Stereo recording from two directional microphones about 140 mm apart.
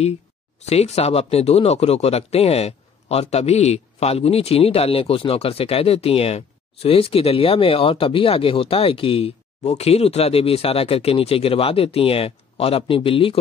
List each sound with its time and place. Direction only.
0.7 s speech: 50° left (ahead or behind)